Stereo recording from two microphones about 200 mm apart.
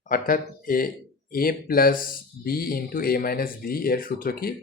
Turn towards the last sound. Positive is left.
turn(degrees=50)  # may be behind; listen again after turning